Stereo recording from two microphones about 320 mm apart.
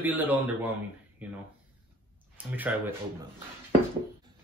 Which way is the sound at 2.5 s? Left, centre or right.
Centre.